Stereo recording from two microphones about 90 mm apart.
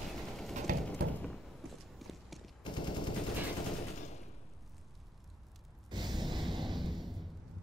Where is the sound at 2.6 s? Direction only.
60° left (ahead or behind).